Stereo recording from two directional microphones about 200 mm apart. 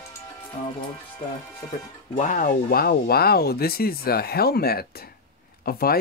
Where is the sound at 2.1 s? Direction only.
40° left (ahead or behind).